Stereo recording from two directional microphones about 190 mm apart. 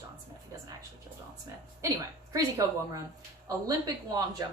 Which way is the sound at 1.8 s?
20° right (ahead or behind).